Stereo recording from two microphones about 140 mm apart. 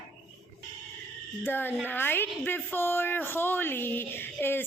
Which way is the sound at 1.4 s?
15° left (ahead or behind).